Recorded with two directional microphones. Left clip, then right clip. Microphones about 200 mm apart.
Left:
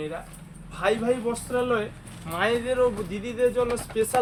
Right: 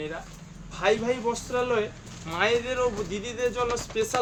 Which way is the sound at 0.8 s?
10° right (ahead or behind).